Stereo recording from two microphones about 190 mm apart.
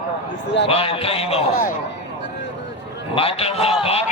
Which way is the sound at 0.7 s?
30° left (ahead or behind).